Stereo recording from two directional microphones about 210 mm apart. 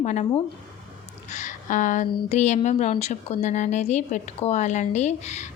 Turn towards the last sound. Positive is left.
turn(degrees=35)  # may be behind; listen again after turning